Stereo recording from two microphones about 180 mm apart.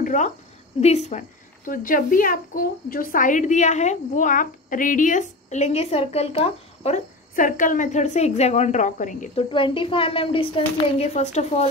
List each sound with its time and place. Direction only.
0.0 s a sound: 45° left (ahead or behind)
0.7 s speech: 35° left (ahead or behind)
1.7 s a woman's voice: 50° left (ahead or behind)
7.3 s a woman's voice: 50° left (ahead or behind)
9.4 s speech: 30° left (ahead or behind)